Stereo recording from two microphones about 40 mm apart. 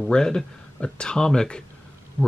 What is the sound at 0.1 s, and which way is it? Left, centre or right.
Speech, centre.